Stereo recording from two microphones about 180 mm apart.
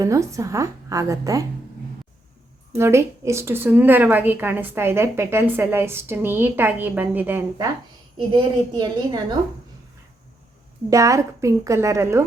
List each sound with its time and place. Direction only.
0.0 s a woman's voice: 15° right (ahead or behind)
2.7 s a woman's voice: 15° right (ahead or behind)
8.3 s a woman's voice: 25° right (ahead or behind)
10.8 s a woman's voice: 15° right (ahead or behind)